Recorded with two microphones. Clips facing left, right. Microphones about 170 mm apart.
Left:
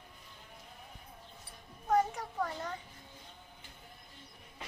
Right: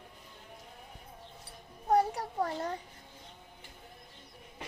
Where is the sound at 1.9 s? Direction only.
35° right (ahead or behind).